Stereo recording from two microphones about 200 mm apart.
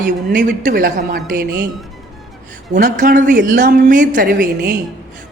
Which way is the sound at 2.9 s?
40° right (ahead or behind).